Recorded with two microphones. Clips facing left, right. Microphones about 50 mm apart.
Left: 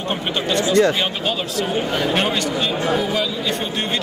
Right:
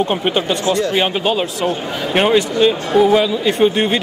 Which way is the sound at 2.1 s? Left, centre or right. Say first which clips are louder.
Right 6 dB; centre.